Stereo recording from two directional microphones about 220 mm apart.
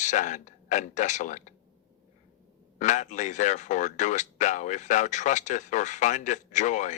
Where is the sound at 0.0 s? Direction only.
35° left (ahead or behind).